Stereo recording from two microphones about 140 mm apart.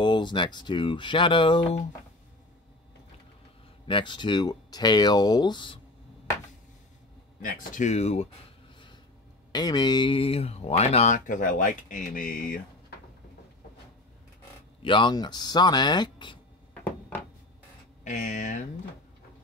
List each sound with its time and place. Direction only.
0.0 s speech: 35° left (ahead or behind)
3.8 s speech: 35° left (ahead or behind)
7.4 s speech: 80° left; by 8.3 s 50° left (ahead or behind)
9.5 s speech: 30° left (ahead or behind); by 11.1 s 50° left (ahead or behind)
11.2 s speech: 70° left (ahead or behind)
14.8 s speech: 35° left (ahead or behind)
17.1 s a sound: 15° left (ahead or behind)
18.0 s speech: 60° left (ahead or behind)